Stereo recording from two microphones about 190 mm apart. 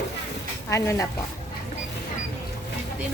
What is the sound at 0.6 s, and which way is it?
Speech, 15° left (ahead or behind).